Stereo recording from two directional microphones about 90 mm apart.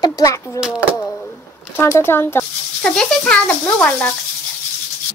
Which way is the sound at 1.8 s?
25° left (ahead or behind).